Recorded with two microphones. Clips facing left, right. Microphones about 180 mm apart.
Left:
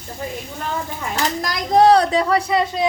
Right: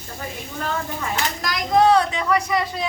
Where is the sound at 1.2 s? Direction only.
35° left (ahead or behind).